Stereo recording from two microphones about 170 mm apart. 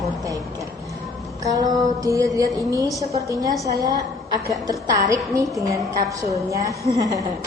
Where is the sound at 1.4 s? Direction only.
20° right (ahead or behind).